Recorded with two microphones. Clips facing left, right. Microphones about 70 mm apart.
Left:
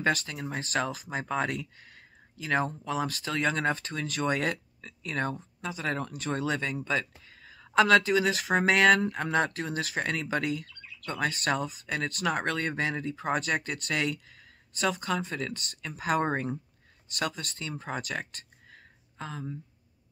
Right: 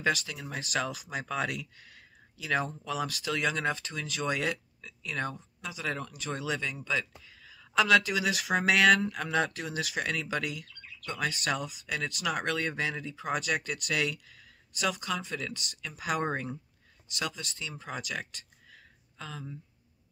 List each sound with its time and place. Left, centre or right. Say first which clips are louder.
0.0 s speech: left 2 dB; left